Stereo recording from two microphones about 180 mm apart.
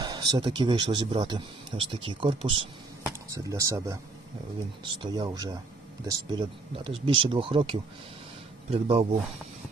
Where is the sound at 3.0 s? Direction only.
20° right (ahead or behind).